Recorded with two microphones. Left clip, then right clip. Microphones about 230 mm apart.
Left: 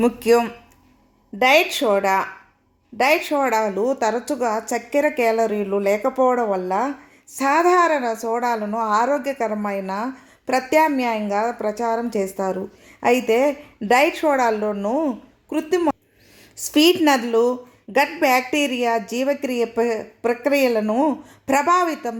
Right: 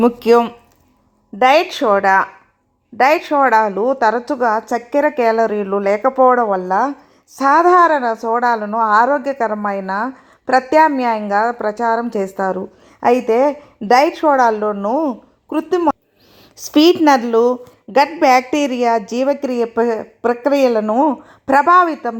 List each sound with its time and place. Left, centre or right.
0.0 s a woman's voice: centre